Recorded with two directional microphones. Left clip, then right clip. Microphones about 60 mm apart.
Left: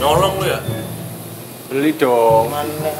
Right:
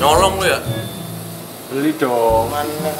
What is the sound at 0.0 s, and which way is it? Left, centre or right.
Speech, centre.